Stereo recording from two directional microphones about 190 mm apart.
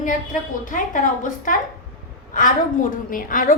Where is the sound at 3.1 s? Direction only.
45° left (ahead or behind).